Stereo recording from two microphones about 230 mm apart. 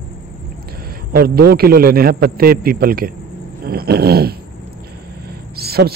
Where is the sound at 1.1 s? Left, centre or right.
Right.